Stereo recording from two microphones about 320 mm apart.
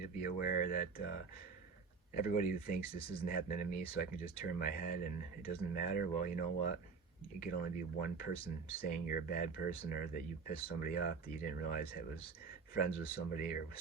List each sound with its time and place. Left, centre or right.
0.0 s speech: left